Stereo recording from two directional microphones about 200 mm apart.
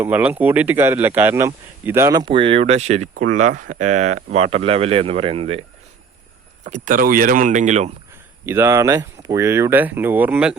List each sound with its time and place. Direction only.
0.0 s speech: 10° right (ahead or behind); by 5.6 s 30° right (ahead or behind)
6.7 s speech: 40° right (ahead or behind)
8.4 s speech: 10° right (ahead or behind)